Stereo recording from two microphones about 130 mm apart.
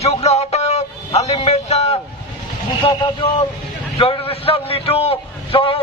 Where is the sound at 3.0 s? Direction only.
40° left (ahead or behind).